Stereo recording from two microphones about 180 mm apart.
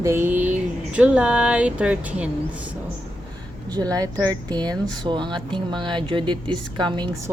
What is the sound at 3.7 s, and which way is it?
Speech, 20° right (ahead or behind).